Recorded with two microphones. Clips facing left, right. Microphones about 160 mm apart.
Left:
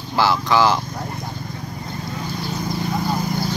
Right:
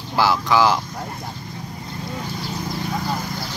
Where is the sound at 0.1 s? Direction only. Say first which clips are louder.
Even; 5° right (ahead or behind).